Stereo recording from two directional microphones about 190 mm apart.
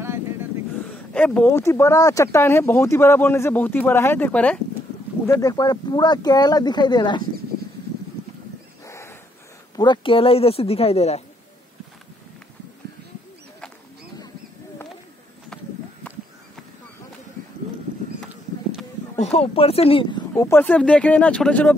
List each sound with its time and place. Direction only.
1.1 s speech: 10° left (ahead or behind)
5.2 s speech: 20° left (ahead or behind)
8.8 s dog: 15° left (ahead or behind)
9.8 s speech: 25° left (ahead or behind)
15.5 s a sound: 5° left (ahead or behind)
18.2 s a sound: centre (ahead or behind)
19.1 s speech: 30° left (ahead or behind)
20.3 s speech: 15° left (ahead or behind)